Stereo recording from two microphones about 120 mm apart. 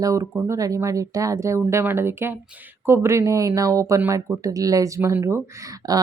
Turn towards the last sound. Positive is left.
turn(degrees=-30)  # may be behind; listen again after turning